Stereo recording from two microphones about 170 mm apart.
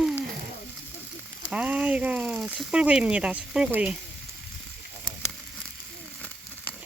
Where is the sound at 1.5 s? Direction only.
5° right (ahead or behind).